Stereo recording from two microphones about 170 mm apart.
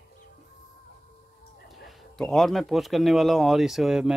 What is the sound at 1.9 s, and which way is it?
Speech, centre (ahead or behind).